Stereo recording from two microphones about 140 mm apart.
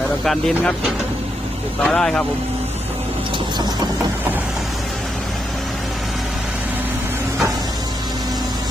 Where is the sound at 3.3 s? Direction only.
30° right (ahead or behind).